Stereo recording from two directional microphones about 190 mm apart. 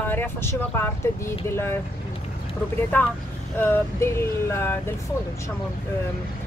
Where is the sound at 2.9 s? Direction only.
10° left (ahead or behind).